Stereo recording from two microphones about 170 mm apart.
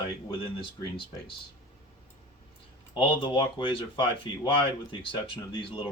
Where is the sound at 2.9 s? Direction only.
30° left (ahead or behind).